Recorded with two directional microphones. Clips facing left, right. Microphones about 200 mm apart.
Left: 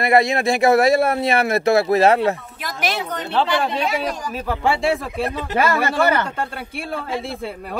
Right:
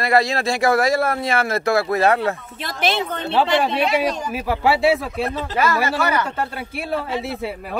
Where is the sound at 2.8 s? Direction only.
25° right (ahead or behind).